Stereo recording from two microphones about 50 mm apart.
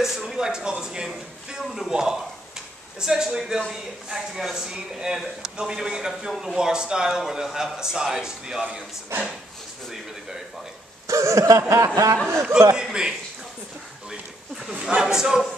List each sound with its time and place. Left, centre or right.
0.0 s speech: centre
11.1 s a sound: right
12.7 s speech: centre
14.7 s speech: centre